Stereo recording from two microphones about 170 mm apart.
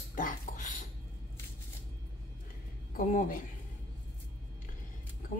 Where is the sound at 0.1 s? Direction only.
50° left (ahead or behind).